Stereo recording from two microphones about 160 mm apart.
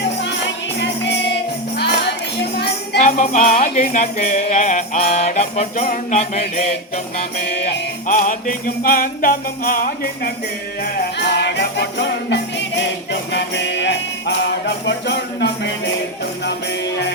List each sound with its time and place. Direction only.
0.0 s music: 90° left
3.0 s music: 50° left (ahead or behind)
7.4 s music: 90° left
8.0 s music: 55° left (ahead or behind)
11.2 s music: 90° left